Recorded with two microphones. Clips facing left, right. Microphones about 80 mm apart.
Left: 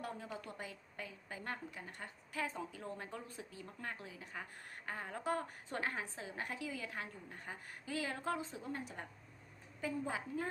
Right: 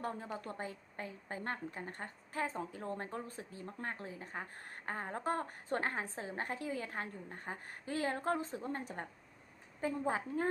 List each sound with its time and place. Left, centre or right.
0.0 s a woman's voice: right